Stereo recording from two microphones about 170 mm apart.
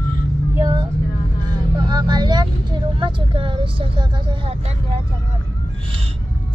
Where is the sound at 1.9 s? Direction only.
25° right (ahead or behind).